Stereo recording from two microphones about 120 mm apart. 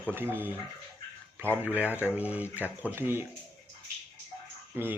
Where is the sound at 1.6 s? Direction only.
10° right (ahead or behind).